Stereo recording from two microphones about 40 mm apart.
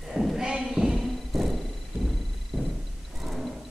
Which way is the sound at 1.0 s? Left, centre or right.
Centre.